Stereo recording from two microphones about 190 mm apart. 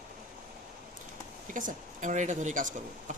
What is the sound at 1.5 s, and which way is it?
Speech, 45° right (ahead or behind).